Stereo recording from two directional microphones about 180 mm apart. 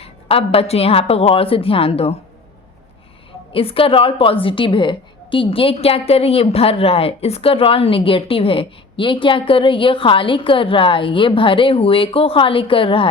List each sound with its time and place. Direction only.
0.0 s a woman's voice: 30° left (ahead or behind)
3.5 s a woman's voice: 30° left (ahead or behind)